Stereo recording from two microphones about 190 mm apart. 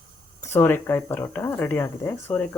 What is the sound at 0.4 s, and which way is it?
Speech, 10° left (ahead or behind).